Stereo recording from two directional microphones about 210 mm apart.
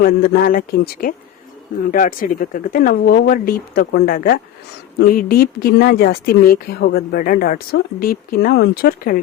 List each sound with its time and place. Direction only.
0.0 s a woman's voice: 45° left (ahead or behind)